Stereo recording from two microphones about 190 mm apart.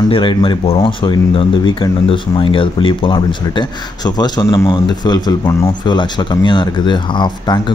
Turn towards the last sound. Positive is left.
turn(degrees=25)  # may be behind; listen again after turning